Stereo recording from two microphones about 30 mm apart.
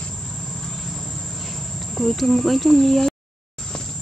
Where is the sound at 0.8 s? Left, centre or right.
Centre.